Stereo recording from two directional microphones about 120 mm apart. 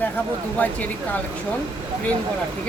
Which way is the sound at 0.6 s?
15° left (ahead or behind).